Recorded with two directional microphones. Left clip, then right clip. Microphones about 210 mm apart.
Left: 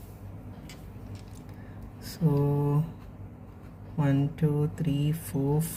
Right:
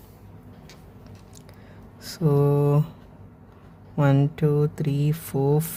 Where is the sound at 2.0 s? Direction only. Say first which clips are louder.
Right 7 dB; 40° right (ahead or behind).